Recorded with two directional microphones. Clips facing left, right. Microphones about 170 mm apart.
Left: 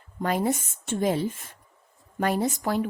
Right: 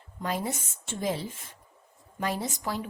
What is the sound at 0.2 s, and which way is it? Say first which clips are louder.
Speech: left 6 dB; 55° left (ahead or behind).